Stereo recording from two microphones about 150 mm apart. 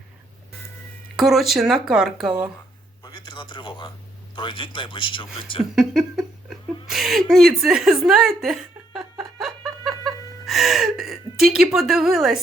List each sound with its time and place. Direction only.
1.1 s speech: centre (ahead or behind)
3.0 s a sound: 30° left (ahead or behind)
4.4 s speech: 35° left (ahead or behind)
5.7 s speech: 5° right (ahead or behind)
7.3 s chuckle: centre (ahead or behind)
10.4 s speech: centre (ahead or behind)